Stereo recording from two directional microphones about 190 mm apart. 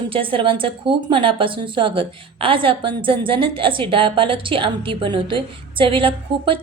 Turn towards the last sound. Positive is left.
turn(degrees=-25)  # may be behind; listen again after turning